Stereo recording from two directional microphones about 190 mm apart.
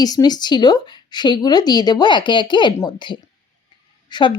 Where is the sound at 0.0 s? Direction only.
20° left (ahead or behind).